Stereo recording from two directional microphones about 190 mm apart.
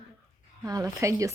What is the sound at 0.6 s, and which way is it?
Speech, 20° right (ahead or behind).